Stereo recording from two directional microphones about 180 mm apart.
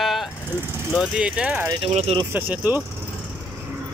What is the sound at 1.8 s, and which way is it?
Speech, 35° right (ahead or behind).